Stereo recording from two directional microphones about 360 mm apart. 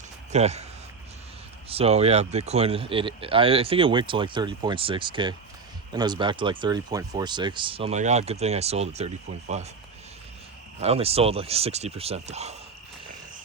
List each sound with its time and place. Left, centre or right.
0.3 s speech: centre
1.7 s speech: centre
10.8 s speech: centre